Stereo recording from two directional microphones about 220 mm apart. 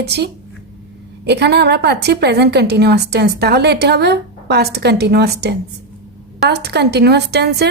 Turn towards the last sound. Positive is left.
turn(degrees=-50)  # may be behind; listen again after turning